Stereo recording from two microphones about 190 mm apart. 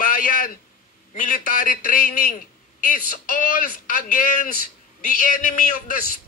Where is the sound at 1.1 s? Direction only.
45° left (ahead or behind).